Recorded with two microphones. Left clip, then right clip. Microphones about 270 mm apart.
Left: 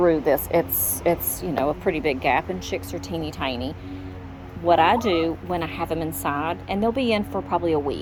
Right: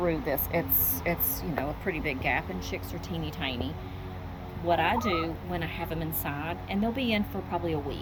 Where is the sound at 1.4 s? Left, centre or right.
Left.